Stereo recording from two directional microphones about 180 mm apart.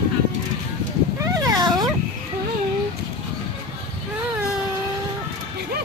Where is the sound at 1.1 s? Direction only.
20° right (ahead or behind).